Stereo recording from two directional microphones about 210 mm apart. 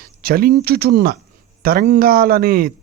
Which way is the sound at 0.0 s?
45° right (ahead or behind).